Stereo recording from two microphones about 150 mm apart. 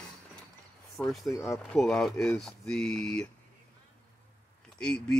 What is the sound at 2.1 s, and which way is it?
Speech, 15° left (ahead or behind).